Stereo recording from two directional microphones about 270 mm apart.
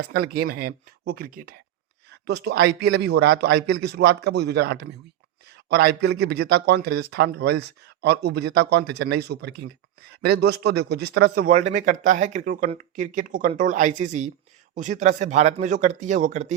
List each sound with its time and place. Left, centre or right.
0.1 s a man's voice: right